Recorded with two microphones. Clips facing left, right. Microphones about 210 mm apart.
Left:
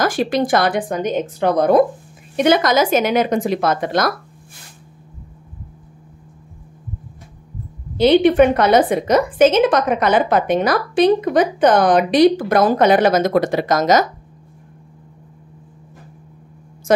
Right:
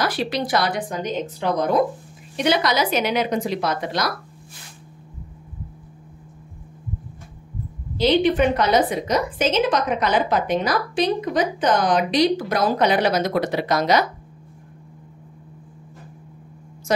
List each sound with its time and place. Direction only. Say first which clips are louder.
0.0 s speech: left 6 dB; 50° left (ahead or behind)
8.0 s a woman's voice: left 6 dB; 55° left (ahead or behind)